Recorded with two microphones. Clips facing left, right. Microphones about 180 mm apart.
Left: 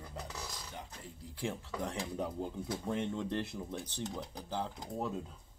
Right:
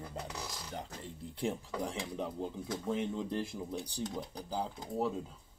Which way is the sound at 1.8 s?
Centre (ahead or behind).